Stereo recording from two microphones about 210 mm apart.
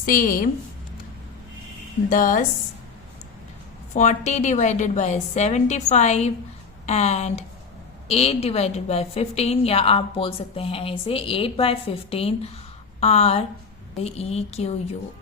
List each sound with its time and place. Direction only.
0.0 s a woman's voice: 40° left (ahead or behind)
2.0 s a woman's voice: 40° left (ahead or behind)
3.9 s a woman's voice: 35° left (ahead or behind)